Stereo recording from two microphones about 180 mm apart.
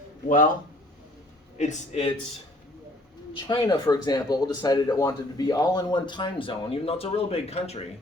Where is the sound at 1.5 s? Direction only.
40° left (ahead or behind).